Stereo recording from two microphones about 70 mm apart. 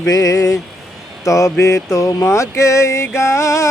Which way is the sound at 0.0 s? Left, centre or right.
Left.